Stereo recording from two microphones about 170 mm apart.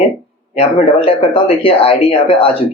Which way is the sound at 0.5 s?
35° left (ahead or behind).